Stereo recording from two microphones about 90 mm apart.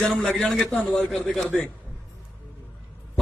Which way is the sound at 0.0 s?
5° left (ahead or behind).